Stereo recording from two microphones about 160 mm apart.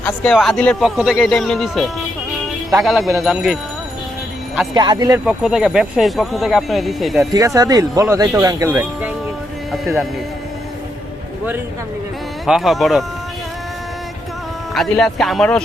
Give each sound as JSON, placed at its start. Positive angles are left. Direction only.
{"t": 0.0, "sound": "speech", "side_deg": 5}
{"t": 4.7, "sound": "speech", "side_deg": -25}
{"t": 5.2, "sound": "speech", "side_deg": -5}
{"t": 7.3, "sound": "speech", "side_deg": -20}
{"t": 12.5, "sound": "speech", "side_deg": 0}
{"t": 14.7, "sound": "speech", "side_deg": 0}